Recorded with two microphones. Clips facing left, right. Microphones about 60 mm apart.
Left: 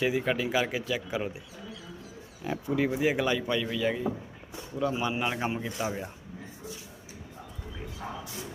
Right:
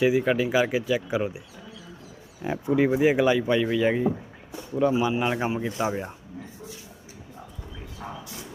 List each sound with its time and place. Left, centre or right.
0.0 s speech: centre
2.4 s speech: right
4.9 s speech: centre
5.7 s speech: right
8.0 s a sound: centre